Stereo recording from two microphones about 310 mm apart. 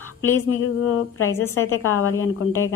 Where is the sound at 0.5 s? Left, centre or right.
Left.